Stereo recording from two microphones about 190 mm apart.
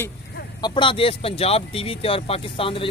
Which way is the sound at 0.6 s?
25° left (ahead or behind).